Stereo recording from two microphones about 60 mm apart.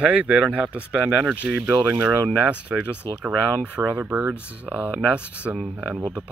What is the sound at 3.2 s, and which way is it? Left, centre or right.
Speech, right.